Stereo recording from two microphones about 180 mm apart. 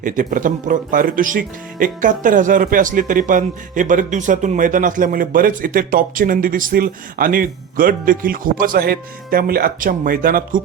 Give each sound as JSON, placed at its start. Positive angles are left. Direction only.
{"t": 0.0, "sound": "speech", "side_deg": -45}